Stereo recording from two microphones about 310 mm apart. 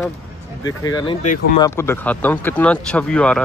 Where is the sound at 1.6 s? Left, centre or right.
Centre.